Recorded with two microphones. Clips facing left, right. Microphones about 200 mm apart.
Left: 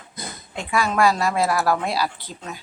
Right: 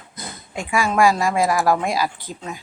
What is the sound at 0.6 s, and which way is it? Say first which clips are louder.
Speech: right 2 dB; 10° right (ahead or behind).